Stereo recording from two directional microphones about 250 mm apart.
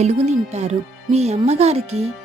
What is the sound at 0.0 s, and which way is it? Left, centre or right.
Speech, right.